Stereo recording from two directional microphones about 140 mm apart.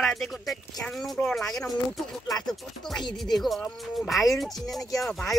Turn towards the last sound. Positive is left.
turn(degrees=0)  # may be behind; listen again after turning